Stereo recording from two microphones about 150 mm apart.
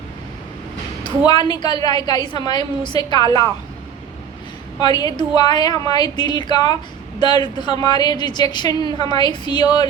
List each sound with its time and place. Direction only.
1.0 s a woman's voice: 30° left (ahead or behind)
4.8 s a woman's voice: 25° left (ahead or behind)